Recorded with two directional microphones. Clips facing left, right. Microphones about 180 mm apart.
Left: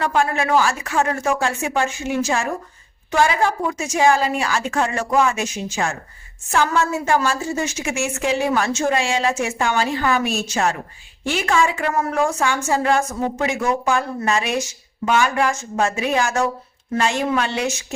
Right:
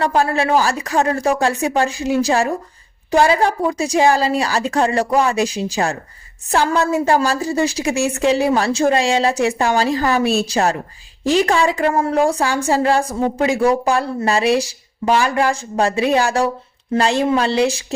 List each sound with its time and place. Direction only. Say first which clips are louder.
0.0 s a woman's voice: right 3 dB; 35° right (ahead or behind)